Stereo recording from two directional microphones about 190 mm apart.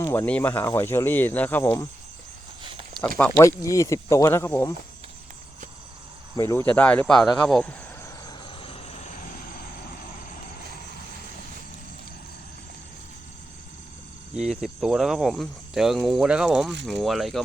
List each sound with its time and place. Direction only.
0.0 s speech: 10° left (ahead or behind)
2.6 s a sound: 25° right (ahead or behind)
3.2 s speech: 10° left (ahead or behind)
6.3 s speech: 15° left (ahead or behind)
8.3 s vehicle: 25° left (ahead or behind); by 9.7 s 50° left (ahead or behind)
14.3 s speech: centre (ahead or behind)